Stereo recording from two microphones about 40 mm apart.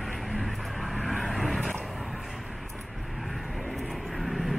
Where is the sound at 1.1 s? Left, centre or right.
Centre.